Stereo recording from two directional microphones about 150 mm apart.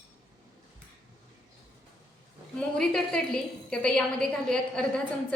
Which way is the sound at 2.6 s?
5° left (ahead or behind).